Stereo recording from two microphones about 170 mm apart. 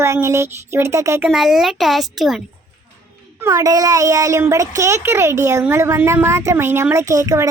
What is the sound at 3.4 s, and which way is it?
A child's voice, 15° right (ahead or behind).